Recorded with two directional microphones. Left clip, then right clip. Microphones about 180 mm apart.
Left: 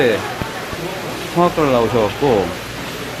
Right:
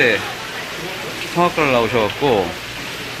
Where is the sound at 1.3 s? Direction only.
10° right (ahead or behind).